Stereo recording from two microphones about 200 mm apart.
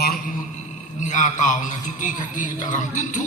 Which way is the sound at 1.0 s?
40° left (ahead or behind).